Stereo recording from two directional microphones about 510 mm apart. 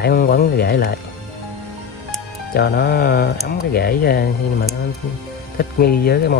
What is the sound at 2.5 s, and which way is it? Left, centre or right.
Speech, centre.